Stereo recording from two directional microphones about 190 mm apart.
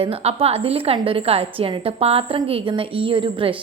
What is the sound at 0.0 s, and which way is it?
A woman's voice, 30° right (ahead or behind).